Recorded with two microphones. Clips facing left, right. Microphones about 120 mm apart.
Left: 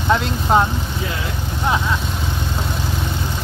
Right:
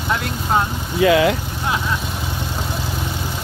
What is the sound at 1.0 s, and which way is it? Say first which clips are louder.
Speech: right 12 dB; 90° right.